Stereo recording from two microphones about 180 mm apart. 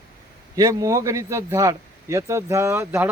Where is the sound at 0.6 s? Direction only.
20° right (ahead or behind).